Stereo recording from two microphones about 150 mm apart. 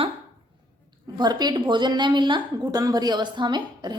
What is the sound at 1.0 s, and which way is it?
A woman's voice, 30° right (ahead or behind).